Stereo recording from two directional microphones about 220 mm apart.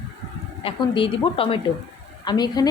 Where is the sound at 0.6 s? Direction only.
25° left (ahead or behind).